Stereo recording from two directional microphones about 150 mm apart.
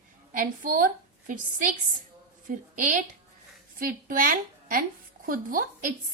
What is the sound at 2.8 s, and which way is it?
A woman's voice, 60° right (ahead or behind).